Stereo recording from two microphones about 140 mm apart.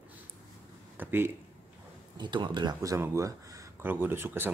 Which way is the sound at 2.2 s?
35° right (ahead or behind).